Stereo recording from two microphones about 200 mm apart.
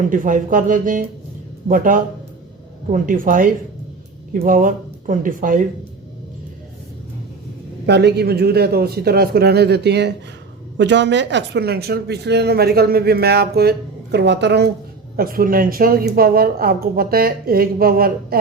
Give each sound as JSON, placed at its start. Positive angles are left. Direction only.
{"t": 0.1, "sound": "a woman's voice", "side_deg": -40}
{"t": 7.9, "sound": "a woman's voice", "side_deg": -55}
{"t": 15.1, "sound": "a woman's voice", "side_deg": -45}